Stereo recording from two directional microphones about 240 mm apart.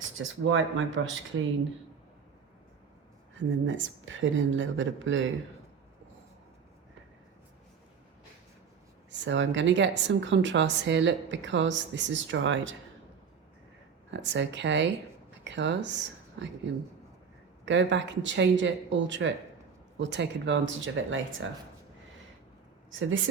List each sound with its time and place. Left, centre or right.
0.2 s a woman's voice: right
3.7 s a woman's voice: right
9.0 s a woman's voice: right
14.1 s a woman's voice: right
17.7 s a woman's voice: right
22.9 s speech: right